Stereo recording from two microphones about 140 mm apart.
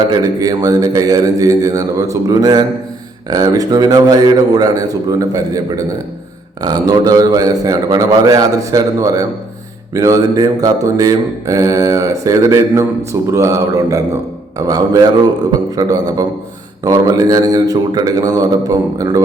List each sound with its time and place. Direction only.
0.1 s mantra: 25° right (ahead or behind)